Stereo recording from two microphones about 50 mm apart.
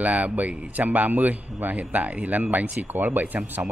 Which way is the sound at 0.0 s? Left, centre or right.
Right.